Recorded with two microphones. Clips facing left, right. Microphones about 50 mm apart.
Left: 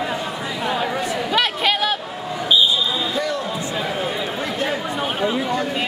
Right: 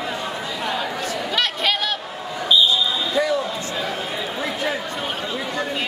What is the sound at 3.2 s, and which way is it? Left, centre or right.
Basketball bounce, centre.